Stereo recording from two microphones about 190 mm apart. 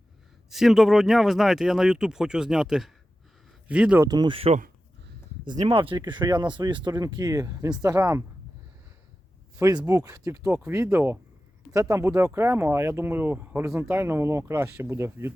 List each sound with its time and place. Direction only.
0.5 s speech: centre (ahead or behind)
9.6 s speech: 15° right (ahead or behind)